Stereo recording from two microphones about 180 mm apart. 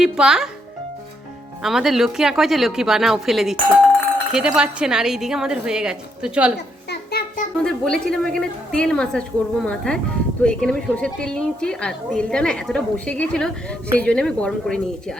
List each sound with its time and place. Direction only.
0.0 s a woman's voice: 5° right (ahead or behind)
1.6 s a woman's voice: centre (ahead or behind)
6.9 s child singing: 60° left (ahead or behind)
7.6 s a woman's voice: 5° left (ahead or behind)